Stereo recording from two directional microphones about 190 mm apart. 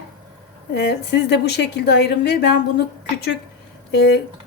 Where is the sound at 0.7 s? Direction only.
60° left (ahead or behind).